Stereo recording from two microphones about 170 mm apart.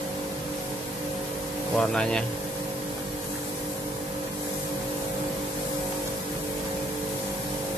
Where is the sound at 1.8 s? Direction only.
5° left (ahead or behind).